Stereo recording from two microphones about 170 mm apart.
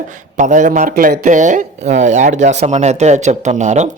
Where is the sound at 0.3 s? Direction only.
45° right (ahead or behind).